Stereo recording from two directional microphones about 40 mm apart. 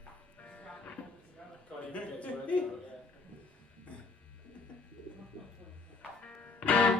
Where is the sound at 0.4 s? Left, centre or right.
Left.